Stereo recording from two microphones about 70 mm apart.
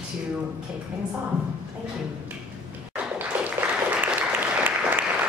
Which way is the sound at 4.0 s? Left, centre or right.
Right.